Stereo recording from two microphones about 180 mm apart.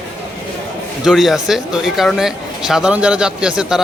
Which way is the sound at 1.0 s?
Centre (ahead or behind).